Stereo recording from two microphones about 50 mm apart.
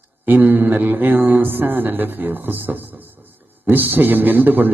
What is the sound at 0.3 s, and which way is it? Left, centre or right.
A man's voice, right.